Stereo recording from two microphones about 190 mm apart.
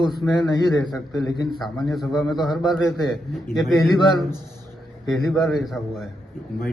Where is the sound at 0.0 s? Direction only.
20° left (ahead or behind).